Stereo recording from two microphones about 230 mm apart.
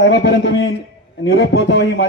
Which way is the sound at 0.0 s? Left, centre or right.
Left.